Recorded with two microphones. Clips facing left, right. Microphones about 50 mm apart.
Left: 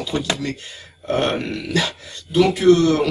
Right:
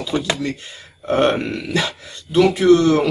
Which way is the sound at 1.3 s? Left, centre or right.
Right.